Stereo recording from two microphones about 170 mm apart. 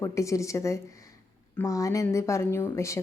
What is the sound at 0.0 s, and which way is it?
A woman's voice, 20° left (ahead or behind).